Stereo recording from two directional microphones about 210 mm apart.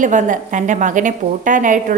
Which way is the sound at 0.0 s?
35° right (ahead or behind).